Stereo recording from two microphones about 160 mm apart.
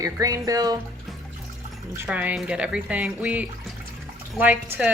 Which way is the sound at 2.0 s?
10° right (ahead or behind).